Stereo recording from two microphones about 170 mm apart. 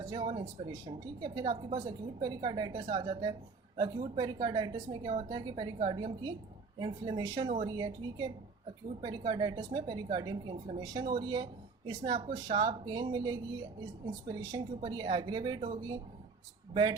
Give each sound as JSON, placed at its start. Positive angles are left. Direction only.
{"t": 0.0, "sound": "a woman's voice", "side_deg": -25}
{"t": 12.5, "sound": "a woman's voice", "side_deg": -30}